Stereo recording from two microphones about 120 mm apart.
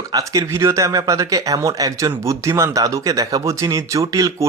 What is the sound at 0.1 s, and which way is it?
Speech, 30° right (ahead or behind).